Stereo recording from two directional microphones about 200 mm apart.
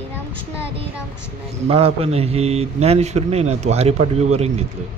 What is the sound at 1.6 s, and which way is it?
A man's voice, 30° right (ahead or behind).